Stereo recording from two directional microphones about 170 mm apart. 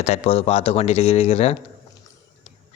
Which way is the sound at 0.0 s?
40° left (ahead or behind).